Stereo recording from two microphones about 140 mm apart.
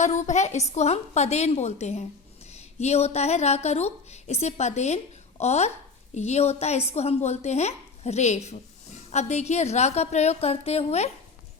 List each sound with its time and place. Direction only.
0.0 s a woman's voice: 60° left (ahead or behind)